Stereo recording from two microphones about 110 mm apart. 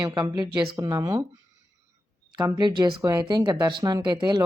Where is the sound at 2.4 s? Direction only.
40° right (ahead or behind).